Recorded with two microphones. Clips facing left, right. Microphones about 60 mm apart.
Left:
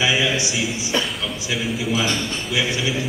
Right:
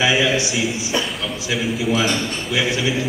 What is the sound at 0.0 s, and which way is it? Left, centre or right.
A man's voice, centre.